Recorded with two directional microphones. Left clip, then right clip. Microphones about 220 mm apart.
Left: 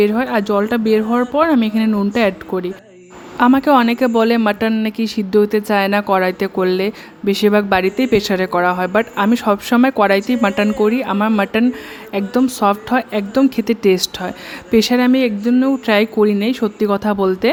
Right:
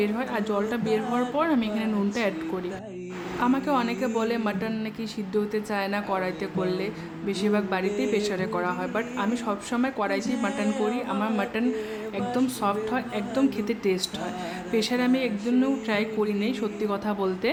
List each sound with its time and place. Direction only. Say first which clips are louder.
0.0 s speech: left 12 dB; 35° left (ahead or behind)
3.4 s speech: left 13 dB; 35° left (ahead or behind)